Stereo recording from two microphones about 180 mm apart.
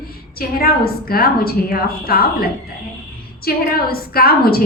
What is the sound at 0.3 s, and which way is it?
A woman's voice, 55° left (ahead or behind).